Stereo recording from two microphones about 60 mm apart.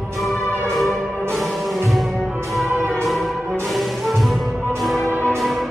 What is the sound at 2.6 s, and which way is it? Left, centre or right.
Music, right.